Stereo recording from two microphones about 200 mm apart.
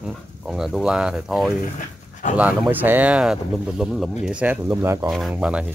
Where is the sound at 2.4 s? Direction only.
10° right (ahead or behind).